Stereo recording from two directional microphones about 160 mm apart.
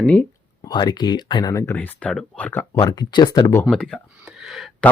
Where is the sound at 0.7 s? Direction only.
25° left (ahead or behind).